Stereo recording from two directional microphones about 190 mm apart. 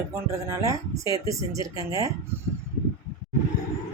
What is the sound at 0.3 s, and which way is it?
Speech, 15° right (ahead or behind).